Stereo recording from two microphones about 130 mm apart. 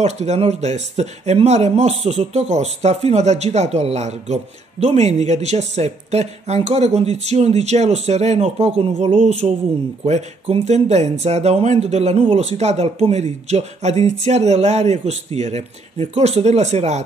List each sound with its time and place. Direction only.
0.0 s speech: 60° right (ahead or behind)